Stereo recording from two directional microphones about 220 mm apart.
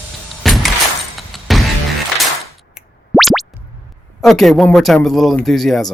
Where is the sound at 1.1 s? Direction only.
Centre (ahead or behind).